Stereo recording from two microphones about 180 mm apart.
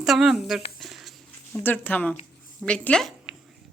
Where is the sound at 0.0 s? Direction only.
Centre (ahead or behind).